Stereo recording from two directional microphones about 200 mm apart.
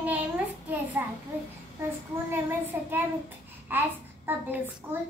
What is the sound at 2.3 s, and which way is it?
Child singing, 10° right (ahead or behind).